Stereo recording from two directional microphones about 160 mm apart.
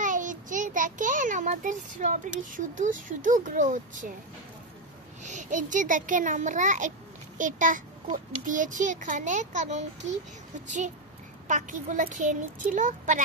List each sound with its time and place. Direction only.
0.0 s a child's voice: 55° right (ahead or behind)
5.2 s a child's voice: 50° right (ahead or behind)
11.4 s a child's voice: 55° right (ahead or behind)